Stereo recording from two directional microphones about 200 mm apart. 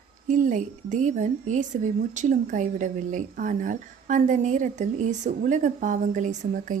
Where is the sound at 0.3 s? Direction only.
40° right (ahead or behind).